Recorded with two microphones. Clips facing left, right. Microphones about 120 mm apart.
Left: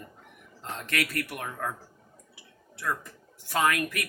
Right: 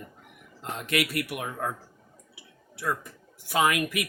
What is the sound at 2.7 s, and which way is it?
Speech, 10° right (ahead or behind).